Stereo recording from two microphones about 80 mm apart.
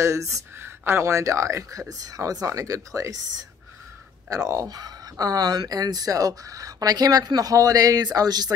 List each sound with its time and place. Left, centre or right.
0.0 s speech: right